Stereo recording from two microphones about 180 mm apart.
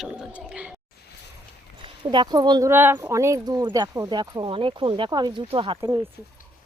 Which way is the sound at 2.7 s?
10° right (ahead or behind).